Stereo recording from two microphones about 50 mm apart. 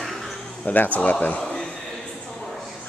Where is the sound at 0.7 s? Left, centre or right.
Left.